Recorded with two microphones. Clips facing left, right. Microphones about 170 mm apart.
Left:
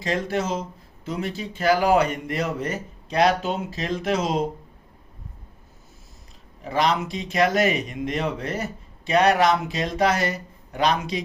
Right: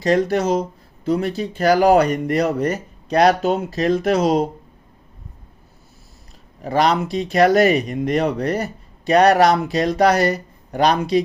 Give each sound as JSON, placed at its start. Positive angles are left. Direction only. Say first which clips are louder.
{"t": 0.0, "sound": "speech", "louder": "right 8 dB", "side_deg": -40}
{"t": 6.6, "sound": "speech", "louder": "right 5 dB", "side_deg": -35}